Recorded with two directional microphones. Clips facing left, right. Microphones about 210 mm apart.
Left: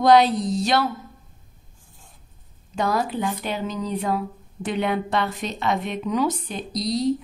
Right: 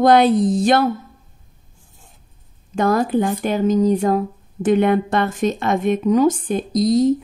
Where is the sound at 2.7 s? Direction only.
50° right (ahead or behind).